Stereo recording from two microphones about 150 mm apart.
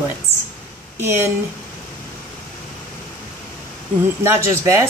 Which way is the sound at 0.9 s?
15° right (ahead or behind).